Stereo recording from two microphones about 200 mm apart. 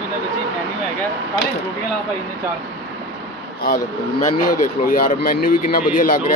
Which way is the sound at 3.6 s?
45° left (ahead or behind).